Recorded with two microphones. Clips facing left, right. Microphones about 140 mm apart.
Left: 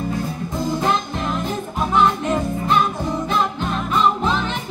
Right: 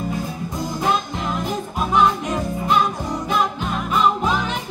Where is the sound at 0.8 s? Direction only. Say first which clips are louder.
Left 1 dB; 15° right (ahead or behind).